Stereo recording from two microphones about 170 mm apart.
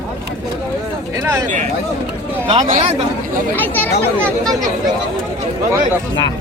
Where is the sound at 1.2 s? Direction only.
15° right (ahead or behind).